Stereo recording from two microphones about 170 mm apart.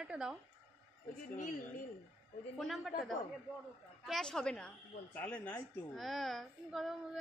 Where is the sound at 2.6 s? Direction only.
Centre (ahead or behind).